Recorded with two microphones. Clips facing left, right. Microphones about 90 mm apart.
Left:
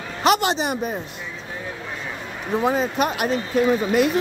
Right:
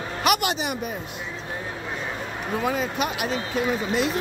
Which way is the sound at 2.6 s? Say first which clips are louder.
Left 5 dB; 35° left (ahead or behind).